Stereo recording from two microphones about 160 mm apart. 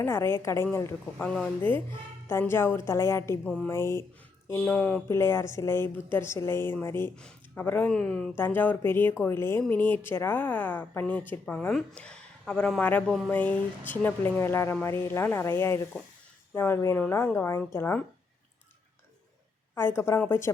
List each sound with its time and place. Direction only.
0.0 s speech: 15° left (ahead or behind)
3.4 s speech: 5° left (ahead or behind)
3.7 s speech: 15° left (ahead or behind)
19.7 s speech: 15° left (ahead or behind)